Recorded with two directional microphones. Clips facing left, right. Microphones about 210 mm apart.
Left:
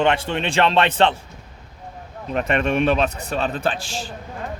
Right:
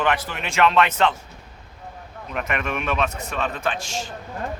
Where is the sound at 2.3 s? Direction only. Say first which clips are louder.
Left 7 dB; 30° left (ahead or behind).